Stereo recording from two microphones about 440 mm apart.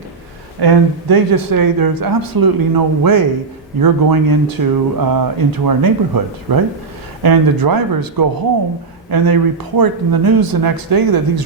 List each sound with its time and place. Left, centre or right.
0.6 s speech: right